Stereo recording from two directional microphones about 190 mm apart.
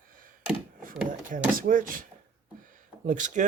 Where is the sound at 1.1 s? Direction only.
45° right (ahead or behind).